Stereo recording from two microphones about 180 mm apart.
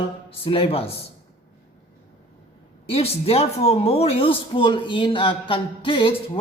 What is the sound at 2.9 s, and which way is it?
A man's voice, 35° left (ahead or behind).